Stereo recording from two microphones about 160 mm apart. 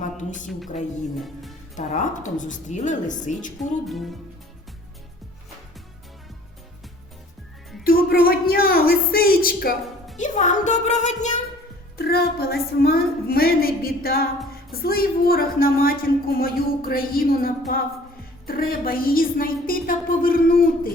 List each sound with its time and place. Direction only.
0.0 s a sound: 50° left (ahead or behind)
1.2 s music: centre (ahead or behind)
1.7 s a woman's voice: 50° left (ahead or behind)
3.6 s music: centre (ahead or behind)
7.9 s a sound: 65° left (ahead or behind)
10.2 s a woman's voice: 50° left (ahead or behind)
11.9 s a woman's voice: 75° left (ahead or behind)